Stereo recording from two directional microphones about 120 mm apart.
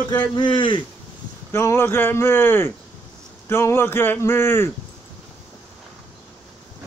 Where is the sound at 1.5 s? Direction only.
20° left (ahead or behind).